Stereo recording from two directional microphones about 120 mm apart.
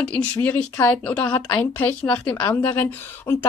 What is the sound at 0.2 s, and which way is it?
Speech, 15° left (ahead or behind).